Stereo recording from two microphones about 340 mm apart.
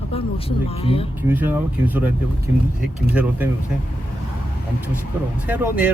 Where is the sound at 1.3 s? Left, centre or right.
Centre.